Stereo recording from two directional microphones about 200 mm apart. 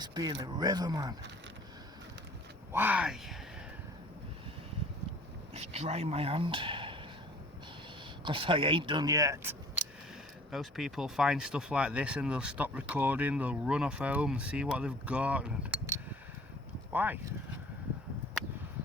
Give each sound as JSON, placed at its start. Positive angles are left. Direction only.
{"t": 0.0, "sound": "speech", "side_deg": -20}
{"t": 2.7, "sound": "speech", "side_deg": -10}
{"t": 5.5, "sound": "speech", "side_deg": -30}
{"t": 8.2, "sound": "speech", "side_deg": -25}
{"t": 10.5, "sound": "speech", "side_deg": 0}